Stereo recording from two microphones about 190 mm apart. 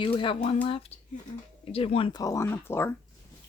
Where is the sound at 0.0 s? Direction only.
25° left (ahead or behind).